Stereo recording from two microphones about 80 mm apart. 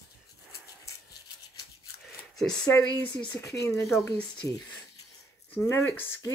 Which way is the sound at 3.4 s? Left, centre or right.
Left.